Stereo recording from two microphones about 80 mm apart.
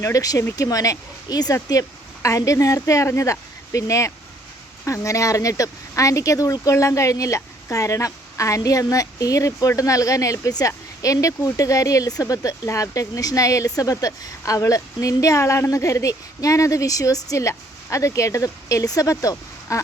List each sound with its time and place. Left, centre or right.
0.0 s speech: left
2.2 s speech: left